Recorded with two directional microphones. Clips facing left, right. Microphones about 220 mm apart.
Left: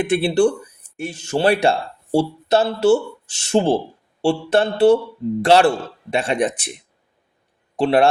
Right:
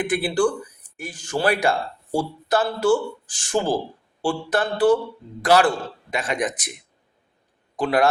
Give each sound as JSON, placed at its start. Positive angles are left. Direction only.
{"t": 0.0, "sound": "speech", "side_deg": 25}
{"t": 7.8, "sound": "speech", "side_deg": 30}